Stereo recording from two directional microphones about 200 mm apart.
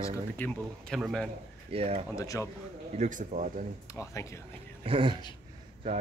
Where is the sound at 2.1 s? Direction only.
15° left (ahead or behind).